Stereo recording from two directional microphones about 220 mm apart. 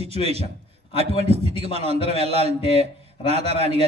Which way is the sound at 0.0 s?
25° right (ahead or behind).